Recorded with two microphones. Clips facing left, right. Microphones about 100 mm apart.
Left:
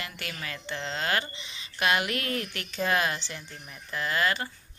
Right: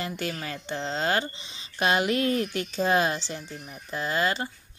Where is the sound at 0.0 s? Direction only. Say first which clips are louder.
Right 6 dB; 30° right (ahead or behind).